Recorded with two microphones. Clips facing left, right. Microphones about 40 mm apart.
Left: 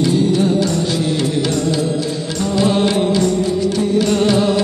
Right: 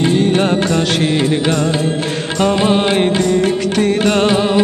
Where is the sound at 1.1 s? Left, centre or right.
Right.